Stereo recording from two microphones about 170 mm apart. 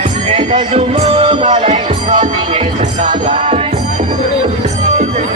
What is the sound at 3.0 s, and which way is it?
Music, 45° right (ahead or behind).